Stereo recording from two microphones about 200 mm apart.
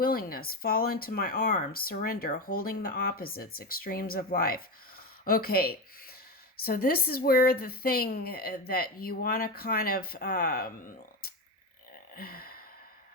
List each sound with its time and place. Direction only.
0.0 s speech: 45° left (ahead or behind)
12.1 s gasp: 50° left (ahead or behind)